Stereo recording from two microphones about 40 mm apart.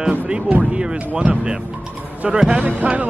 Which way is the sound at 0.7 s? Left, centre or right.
Right.